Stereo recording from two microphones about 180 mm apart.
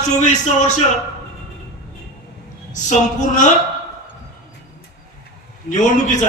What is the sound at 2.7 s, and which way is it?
Speech, 45° left (ahead or behind).